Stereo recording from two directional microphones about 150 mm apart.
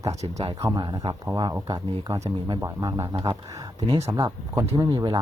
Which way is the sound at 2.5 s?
20° right (ahead or behind).